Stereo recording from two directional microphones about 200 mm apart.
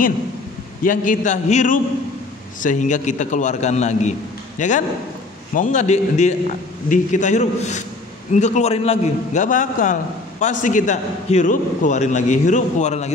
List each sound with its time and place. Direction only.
0.8 s a man's voice: 40° left (ahead or behind)